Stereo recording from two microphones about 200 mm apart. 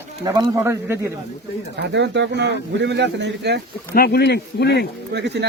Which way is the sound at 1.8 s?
60° right (ahead or behind).